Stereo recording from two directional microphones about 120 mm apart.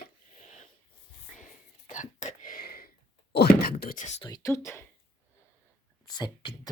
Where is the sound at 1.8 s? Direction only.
90° left.